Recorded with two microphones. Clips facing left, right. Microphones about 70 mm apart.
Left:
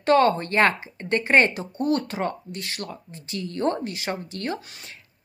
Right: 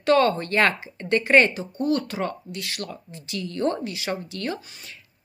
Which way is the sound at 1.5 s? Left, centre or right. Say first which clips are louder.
Even; left.